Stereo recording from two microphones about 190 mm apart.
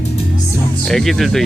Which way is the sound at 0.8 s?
5° left (ahead or behind).